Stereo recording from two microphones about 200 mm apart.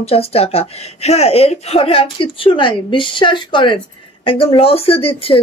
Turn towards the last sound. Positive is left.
turn(degrees=30)  # may be behind; listen again after turning